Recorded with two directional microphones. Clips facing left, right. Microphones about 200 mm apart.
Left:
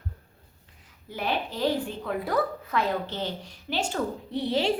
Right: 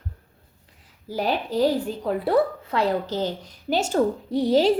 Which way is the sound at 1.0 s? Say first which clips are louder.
Right 5 dB; 35° right (ahead or behind).